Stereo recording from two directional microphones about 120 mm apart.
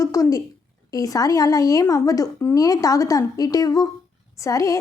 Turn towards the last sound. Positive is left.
turn(degrees=25)  # may be behind; listen again after turning